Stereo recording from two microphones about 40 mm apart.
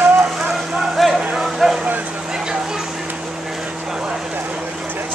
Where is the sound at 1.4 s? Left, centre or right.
Centre.